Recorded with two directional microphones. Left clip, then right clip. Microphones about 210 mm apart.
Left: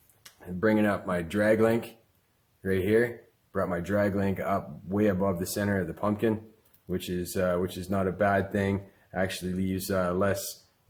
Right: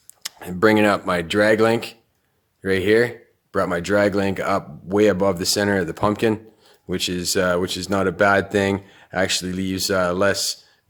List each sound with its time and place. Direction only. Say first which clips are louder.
0.2 s speech: right 11 dB; 50° right (ahead or behind)